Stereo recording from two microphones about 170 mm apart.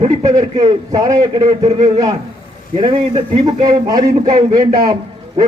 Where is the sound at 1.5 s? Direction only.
40° right (ahead or behind); by 5.0 s 20° right (ahead or behind).